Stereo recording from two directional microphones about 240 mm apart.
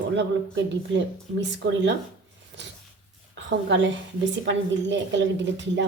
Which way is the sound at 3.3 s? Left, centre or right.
Right.